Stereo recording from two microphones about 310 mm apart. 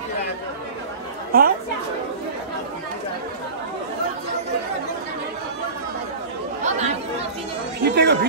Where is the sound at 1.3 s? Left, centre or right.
Right.